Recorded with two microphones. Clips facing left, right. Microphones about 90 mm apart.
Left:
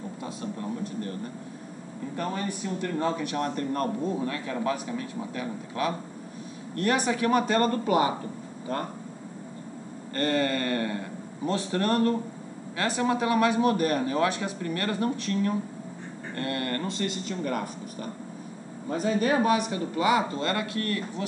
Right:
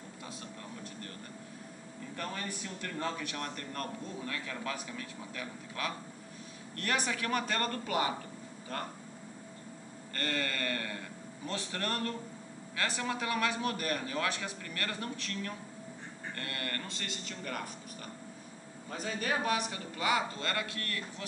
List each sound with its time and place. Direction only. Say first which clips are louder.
0.2 s speech: left 11 dB; 25° left (ahead or behind)
2.1 s a man's voice: left 8 dB; 20° left (ahead or behind)
10.1 s a man's voice: left 10 dB; 25° left (ahead or behind)
18.9 s a man's voice: left 10 dB; 25° left (ahead or behind)